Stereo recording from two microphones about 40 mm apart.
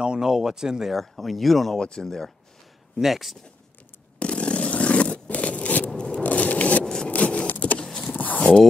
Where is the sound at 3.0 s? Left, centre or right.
Centre.